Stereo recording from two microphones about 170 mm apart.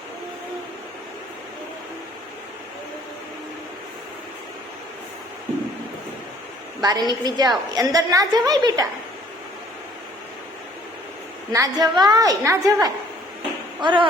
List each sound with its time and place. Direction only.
6.8 s a woman's voice: 25° right (ahead or behind)
11.5 s a woman's voice: 20° right (ahead or behind)